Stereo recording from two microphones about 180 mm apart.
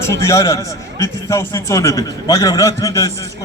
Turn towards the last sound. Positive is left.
turn(degrees=20)  # may be behind; listen again after turning